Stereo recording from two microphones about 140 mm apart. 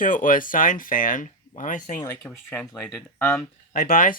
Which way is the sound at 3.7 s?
75° left (ahead or behind).